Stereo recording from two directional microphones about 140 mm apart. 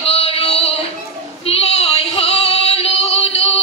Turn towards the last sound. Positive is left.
turn(degrees=45)  # may be behind; listen again after turning